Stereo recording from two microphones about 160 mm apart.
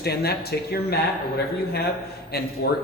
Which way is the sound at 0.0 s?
80° left.